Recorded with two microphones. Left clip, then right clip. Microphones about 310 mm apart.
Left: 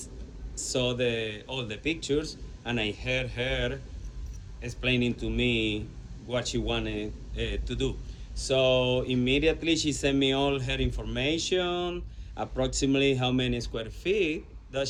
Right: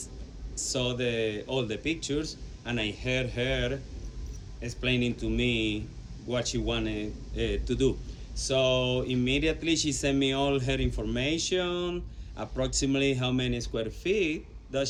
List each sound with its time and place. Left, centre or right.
0.5 s speech: centre
8.8 s a sound: right
9.2 s speech: centre